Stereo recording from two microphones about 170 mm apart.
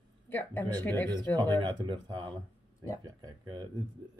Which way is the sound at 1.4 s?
25° right (ahead or behind).